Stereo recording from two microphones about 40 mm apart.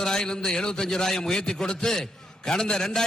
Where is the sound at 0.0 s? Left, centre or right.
Centre.